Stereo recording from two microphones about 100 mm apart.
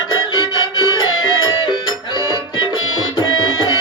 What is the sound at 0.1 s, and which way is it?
Music, 45° left (ahead or behind).